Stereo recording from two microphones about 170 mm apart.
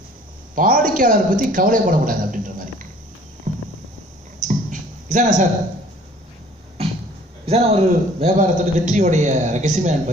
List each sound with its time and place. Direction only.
0.6 s a man's voice: 50° right (ahead or behind)
3.5 s clip-clop: 45° right (ahead or behind)
4.4 s a sound: 45° right (ahead or behind)
7.4 s a man's voice: 35° right (ahead or behind)